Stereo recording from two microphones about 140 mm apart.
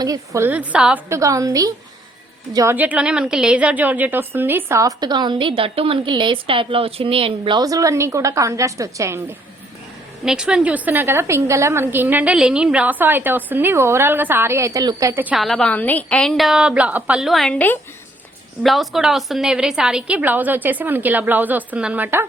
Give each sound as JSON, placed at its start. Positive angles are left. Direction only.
{"t": 0.0, "sound": "a woman's voice", "side_deg": -25}
{"t": 0.4, "sound": "a woman's voice", "side_deg": -10}
{"t": 1.1, "sound": "a woman's voice", "side_deg": -25}
{"t": 2.7, "sound": "a woman's voice", "side_deg": -10}
{"t": 10.2, "sound": "a woman's voice", "side_deg": -5}
{"t": 15.4, "sound": "a woman's voice", "side_deg": 5}
{"t": 18.6, "sound": "a woman's voice", "side_deg": 0}